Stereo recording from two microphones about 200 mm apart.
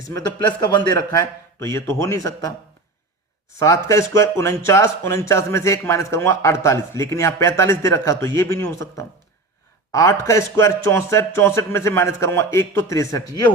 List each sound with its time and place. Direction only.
0.1 s a man's voice: 20° left (ahead or behind)
3.6 s a man's voice: 15° left (ahead or behind)